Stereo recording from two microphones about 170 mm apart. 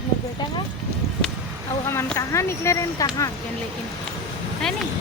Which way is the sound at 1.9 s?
15° left (ahead or behind).